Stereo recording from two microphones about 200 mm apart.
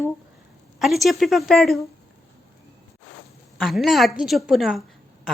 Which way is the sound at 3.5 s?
Centre (ahead or behind).